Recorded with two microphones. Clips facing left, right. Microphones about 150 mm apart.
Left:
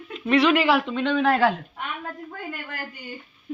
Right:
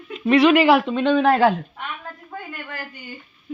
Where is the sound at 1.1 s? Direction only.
35° right (ahead or behind).